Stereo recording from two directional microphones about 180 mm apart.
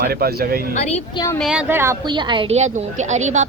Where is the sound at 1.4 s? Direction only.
5° right (ahead or behind).